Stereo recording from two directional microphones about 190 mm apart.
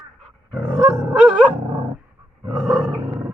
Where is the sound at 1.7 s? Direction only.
25° right (ahead or behind).